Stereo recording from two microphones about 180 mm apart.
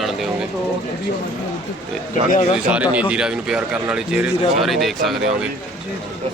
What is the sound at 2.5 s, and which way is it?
Speech, 5° right (ahead or behind).